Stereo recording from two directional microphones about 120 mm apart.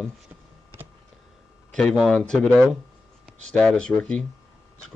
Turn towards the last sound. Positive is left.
turn(degrees=10)  # may be behind; listen again after turning